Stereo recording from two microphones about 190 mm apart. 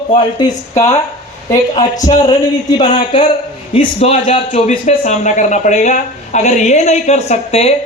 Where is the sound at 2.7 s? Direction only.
40° left (ahead or behind).